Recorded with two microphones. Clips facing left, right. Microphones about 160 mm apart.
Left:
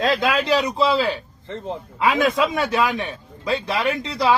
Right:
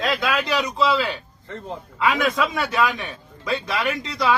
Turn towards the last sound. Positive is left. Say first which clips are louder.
# left 2 dB
turn(degrees=25)  # may be behind; listen again after turning